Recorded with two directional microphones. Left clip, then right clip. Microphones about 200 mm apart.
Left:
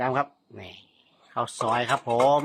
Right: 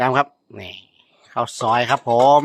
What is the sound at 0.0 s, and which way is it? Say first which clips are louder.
Speech: right 8 dB; 50° right (ahead or behind).